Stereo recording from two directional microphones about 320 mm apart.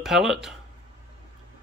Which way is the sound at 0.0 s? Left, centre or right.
Centre.